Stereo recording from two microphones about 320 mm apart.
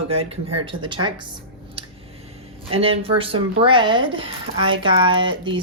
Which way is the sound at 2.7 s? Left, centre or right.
Centre.